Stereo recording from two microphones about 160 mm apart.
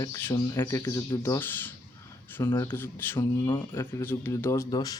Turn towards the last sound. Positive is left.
turn(degrees=20)  # may be behind; listen again after turning